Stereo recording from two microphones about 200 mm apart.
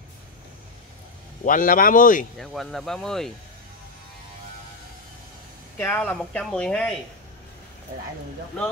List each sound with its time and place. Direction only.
1.4 s speech: 40° left (ahead or behind)
2.3 s speech: centre (ahead or behind)
5.8 s speech: 10° left (ahead or behind)